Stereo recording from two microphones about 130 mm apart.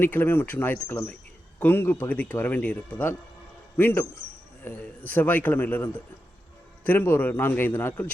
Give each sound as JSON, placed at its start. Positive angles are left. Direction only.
{"t": 0.0, "sound": "speech", "side_deg": 15}